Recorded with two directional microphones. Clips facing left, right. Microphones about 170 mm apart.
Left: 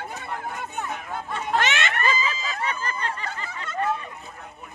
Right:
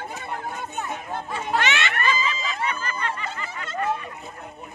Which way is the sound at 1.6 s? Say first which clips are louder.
Even; 45° left (ahead or behind).